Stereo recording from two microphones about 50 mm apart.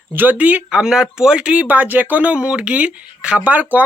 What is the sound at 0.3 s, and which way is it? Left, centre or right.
Speech, right.